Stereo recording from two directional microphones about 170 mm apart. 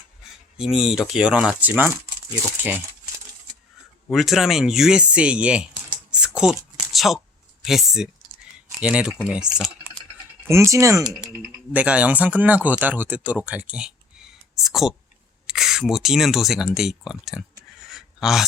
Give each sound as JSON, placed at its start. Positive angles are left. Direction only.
{"t": 0.5, "sound": "speech", "side_deg": -5}
{"t": 4.1, "sound": "speech", "side_deg": 0}
{"t": 6.1, "sound": "a sound", "side_deg": -5}
{"t": 7.6, "sound": "speech", "side_deg": 0}
{"t": 10.5, "sound": "speech", "side_deg": -15}
{"t": 17.8, "sound": "a sound", "side_deg": 0}